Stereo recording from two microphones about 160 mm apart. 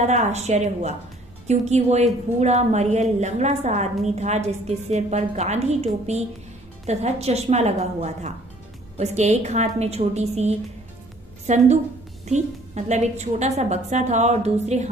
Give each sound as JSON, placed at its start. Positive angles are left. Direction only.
{"t": 0.0, "sound": "a woman's voice", "side_deg": -45}